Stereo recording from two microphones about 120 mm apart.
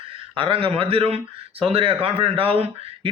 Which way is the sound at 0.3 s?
50° right (ahead or behind).